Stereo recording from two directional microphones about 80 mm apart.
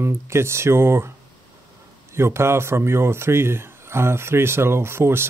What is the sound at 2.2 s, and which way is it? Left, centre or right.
Speech, right.